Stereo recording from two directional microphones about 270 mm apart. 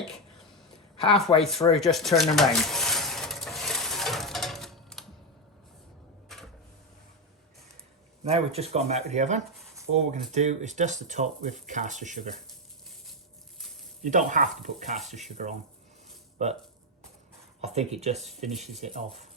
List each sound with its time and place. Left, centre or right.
0.0 s a sound: centre
1.4 s speech: centre
1.7 s coin: centre
6.3 s a sound: centre
8.2 s speech: right
14.0 s speech: right
17.6 s speech: right